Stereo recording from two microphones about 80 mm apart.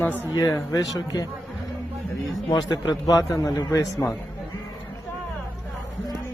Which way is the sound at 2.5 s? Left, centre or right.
Left.